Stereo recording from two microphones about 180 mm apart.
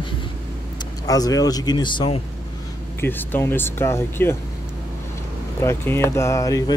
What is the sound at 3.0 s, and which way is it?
Speech, 10° left (ahead or behind).